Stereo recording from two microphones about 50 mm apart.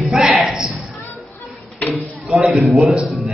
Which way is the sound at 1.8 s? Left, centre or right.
Left.